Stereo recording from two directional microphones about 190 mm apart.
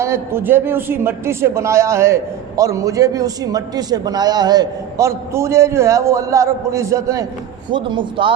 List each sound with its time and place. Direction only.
0.0 s a man's voice: 15° right (ahead or behind)